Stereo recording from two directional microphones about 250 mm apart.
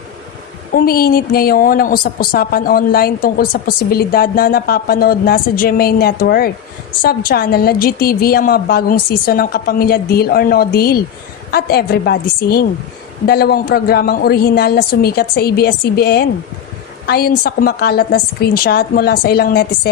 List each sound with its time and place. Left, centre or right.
0.7 s a woman's voice: left